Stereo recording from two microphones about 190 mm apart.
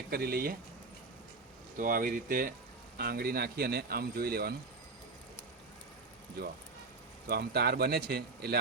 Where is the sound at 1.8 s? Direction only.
45° right (ahead or behind).